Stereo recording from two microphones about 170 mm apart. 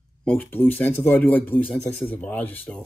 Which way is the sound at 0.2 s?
10° left (ahead or behind).